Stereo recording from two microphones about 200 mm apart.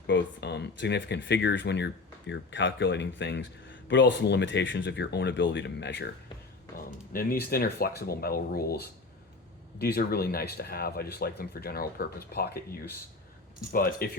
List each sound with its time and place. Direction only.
0.1 s speech: 60° left (ahead or behind)
6.7 s speech: 45° left (ahead or behind)